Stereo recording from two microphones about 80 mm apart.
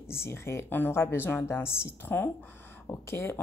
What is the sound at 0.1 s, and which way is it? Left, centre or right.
Speech, left.